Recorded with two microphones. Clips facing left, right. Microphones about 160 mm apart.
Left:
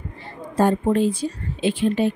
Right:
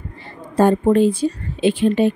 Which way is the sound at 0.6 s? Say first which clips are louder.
Right 4 dB; 65° right (ahead or behind).